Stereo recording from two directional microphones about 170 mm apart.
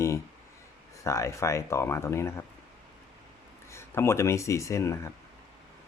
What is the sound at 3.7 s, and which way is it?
Speech, 15° left (ahead or behind).